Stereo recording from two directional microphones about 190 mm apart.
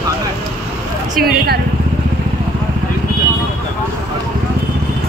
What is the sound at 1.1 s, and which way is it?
Speech, 50° right (ahead or behind).